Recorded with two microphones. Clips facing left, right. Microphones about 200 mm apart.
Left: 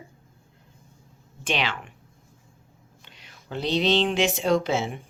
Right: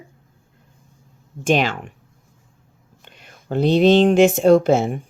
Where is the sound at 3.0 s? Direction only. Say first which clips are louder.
Right 6 dB; 50° right (ahead or behind).